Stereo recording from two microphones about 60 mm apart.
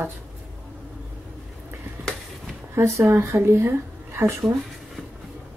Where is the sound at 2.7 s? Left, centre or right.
Right.